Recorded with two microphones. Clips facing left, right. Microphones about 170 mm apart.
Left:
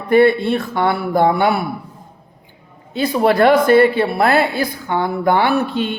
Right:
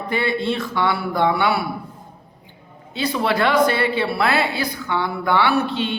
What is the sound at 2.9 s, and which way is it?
Speech, 50° left (ahead or behind).